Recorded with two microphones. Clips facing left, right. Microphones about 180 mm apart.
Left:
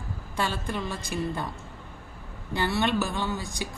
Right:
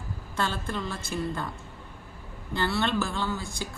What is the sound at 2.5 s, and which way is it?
A woman's voice, 15° left (ahead or behind).